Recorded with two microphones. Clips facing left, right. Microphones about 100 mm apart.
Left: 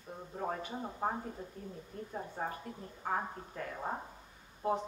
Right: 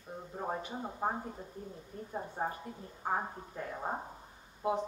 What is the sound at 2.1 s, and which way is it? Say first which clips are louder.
A woman's voice: right 3 dB; 20° right (ahead or behind).